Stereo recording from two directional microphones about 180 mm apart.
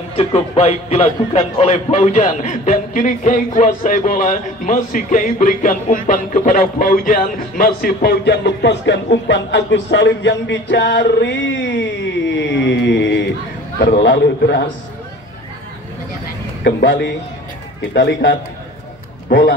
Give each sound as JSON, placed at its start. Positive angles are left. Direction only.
{"t": 0.1, "sound": "a man's voice", "side_deg": 35}
{"t": 12.3, "sound": "a sound", "side_deg": 85}
{"t": 14.0, "sound": "a man's voice", "side_deg": 75}
{"t": 16.6, "sound": "a man's voice", "side_deg": 75}
{"t": 19.2, "sound": "a man's voice", "side_deg": 55}